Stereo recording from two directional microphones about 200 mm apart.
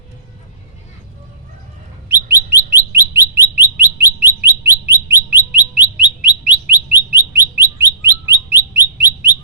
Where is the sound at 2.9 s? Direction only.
10° right (ahead or behind).